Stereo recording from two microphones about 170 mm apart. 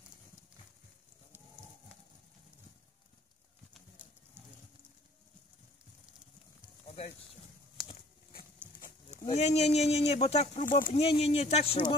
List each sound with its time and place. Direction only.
7.8 s a sound: centre (ahead or behind)
9.3 s speech: 40° left (ahead or behind)
10.9 s speech: 35° left (ahead or behind)